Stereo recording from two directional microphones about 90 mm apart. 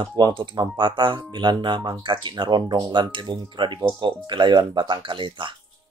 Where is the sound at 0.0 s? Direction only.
55° right (ahead or behind).